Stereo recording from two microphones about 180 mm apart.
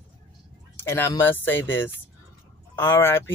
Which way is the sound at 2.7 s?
10° left (ahead or behind).